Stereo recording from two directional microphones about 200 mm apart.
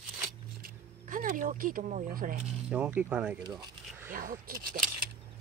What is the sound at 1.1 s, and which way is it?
Speech, 45° right (ahead or behind).